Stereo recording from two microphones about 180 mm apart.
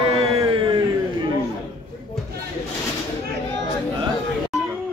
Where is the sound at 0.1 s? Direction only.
30° right (ahead or behind).